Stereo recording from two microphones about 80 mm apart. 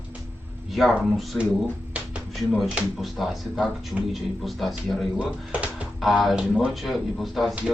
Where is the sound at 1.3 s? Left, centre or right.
Left.